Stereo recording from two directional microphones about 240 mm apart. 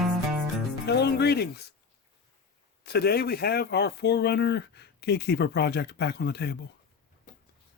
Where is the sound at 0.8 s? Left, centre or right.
Left.